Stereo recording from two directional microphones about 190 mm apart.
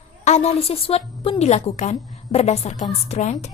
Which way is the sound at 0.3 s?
35° left (ahead or behind).